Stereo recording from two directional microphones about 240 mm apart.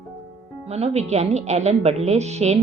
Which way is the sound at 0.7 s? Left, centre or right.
Right.